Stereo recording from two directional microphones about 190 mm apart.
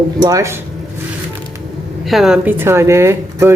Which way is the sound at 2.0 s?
Centre (ahead or behind).